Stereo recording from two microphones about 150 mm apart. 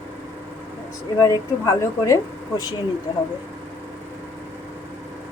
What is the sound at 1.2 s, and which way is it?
Speech, 20° left (ahead or behind).